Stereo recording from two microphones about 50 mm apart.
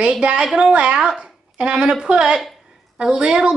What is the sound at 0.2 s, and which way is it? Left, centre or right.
Speech, right.